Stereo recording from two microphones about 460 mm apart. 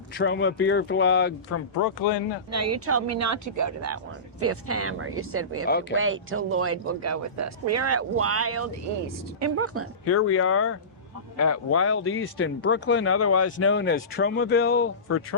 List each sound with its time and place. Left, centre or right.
0.2 s speech: left
2.5 s speech: right
5.6 s speech: centre
6.0 s speech: right
10.1 s speech: left